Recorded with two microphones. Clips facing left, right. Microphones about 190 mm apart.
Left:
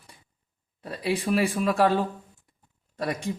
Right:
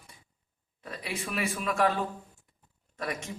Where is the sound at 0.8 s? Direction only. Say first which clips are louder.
Left 10 dB; 35° left (ahead or behind).